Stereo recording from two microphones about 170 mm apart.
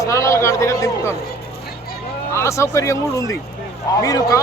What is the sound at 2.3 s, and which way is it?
A man's voice, 15° left (ahead or behind).